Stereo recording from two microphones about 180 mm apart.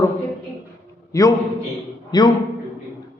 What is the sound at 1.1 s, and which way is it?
A man's voice, 20° left (ahead or behind).